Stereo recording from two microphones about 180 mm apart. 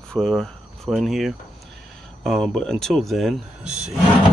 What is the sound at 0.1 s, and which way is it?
Speech, centre (ahead or behind).